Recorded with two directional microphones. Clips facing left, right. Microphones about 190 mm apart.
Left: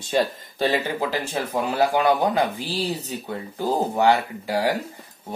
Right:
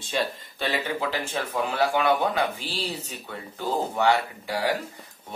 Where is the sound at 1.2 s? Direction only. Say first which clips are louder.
Left 3 dB; 40° left (ahead or behind).